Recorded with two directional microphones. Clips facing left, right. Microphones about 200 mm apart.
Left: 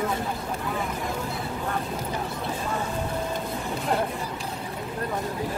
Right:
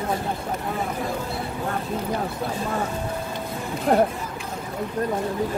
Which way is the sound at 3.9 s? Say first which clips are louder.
Right 8 dB; 50° right (ahead or behind).